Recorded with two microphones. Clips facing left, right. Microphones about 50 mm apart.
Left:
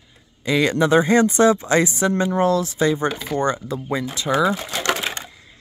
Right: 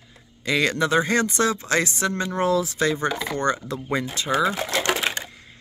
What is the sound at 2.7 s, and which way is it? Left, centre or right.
Speech, centre.